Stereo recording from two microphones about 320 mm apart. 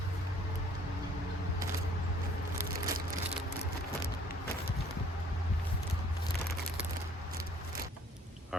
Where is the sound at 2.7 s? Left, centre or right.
Right.